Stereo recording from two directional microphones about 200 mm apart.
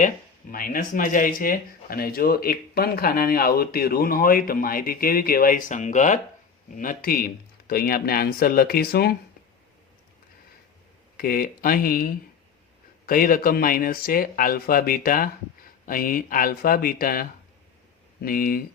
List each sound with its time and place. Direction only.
0.5 s speech: 45° left (ahead or behind)
11.2 s speech: 45° left (ahead or behind)